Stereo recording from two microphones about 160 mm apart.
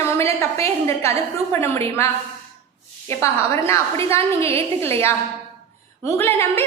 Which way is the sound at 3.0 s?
15° left (ahead or behind).